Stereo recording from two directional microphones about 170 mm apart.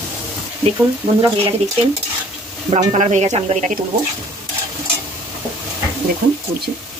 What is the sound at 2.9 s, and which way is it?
Speech, 45° right (ahead or behind).